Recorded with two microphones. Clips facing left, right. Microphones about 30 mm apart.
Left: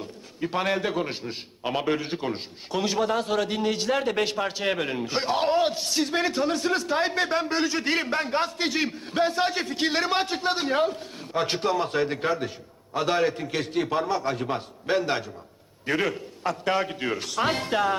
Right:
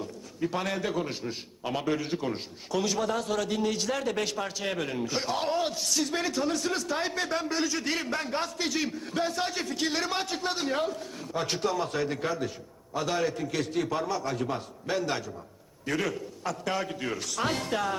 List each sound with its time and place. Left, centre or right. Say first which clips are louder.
0.0 s a man's voice: even; left